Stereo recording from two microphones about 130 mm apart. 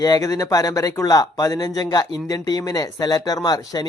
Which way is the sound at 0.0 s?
30° left (ahead or behind).